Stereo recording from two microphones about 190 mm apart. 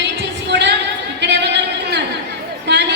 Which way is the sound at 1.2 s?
65° right (ahead or behind).